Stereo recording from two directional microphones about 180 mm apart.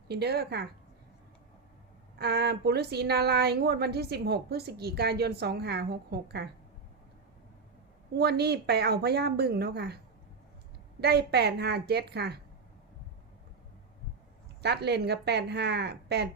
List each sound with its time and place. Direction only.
0.1 s speech: 60° right (ahead or behind)
2.1 s speech: 65° right (ahead or behind)
8.1 s speech: 65° right (ahead or behind)
11.0 s speech: 65° right (ahead or behind)
14.6 s a woman's voice: 65° right (ahead or behind)